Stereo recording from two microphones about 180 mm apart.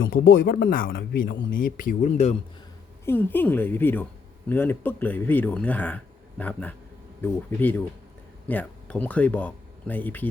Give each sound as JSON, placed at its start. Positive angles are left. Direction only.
{"t": 0.0, "sound": "speech", "side_deg": 55}
{"t": 3.1, "sound": "speech", "side_deg": 10}